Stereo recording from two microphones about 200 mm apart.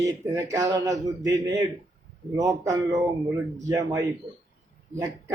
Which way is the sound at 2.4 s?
15° right (ahead or behind).